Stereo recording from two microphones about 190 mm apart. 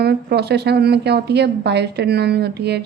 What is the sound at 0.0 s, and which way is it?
Speech, 60° right (ahead or behind).